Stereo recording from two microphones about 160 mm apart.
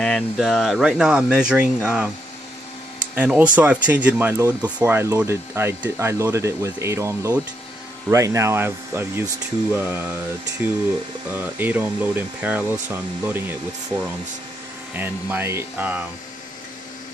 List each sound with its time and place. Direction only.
0.0 s speech: centre (ahead or behind)
3.2 s speech: 5° right (ahead or behind)
11.3 s speech: 10° right (ahead or behind)